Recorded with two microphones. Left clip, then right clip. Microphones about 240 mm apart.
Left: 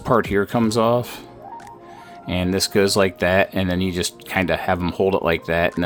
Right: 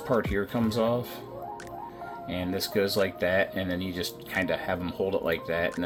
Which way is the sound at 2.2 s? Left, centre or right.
Left.